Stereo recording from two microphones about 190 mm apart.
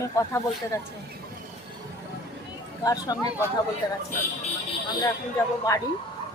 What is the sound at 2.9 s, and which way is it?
Speech, 20° left (ahead or behind).